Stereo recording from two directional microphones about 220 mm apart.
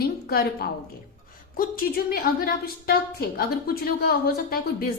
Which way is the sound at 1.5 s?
40° left (ahead or behind).